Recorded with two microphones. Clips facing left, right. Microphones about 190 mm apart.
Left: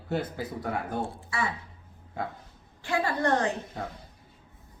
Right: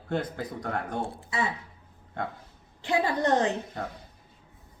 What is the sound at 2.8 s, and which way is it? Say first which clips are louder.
Speech: right 2 dB; 20° right (ahead or behind).